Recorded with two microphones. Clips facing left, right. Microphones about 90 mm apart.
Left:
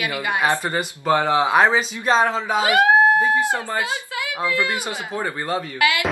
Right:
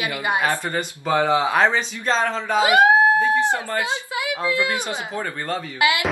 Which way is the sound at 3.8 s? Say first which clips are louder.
Right 2 dB; 20° right (ahead or behind).